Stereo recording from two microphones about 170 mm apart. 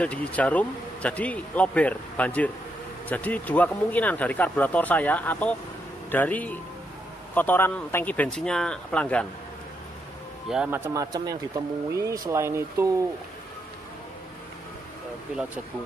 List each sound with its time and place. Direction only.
0.0 s speech: 10° left (ahead or behind)
10.5 s speech: 10° right (ahead or behind)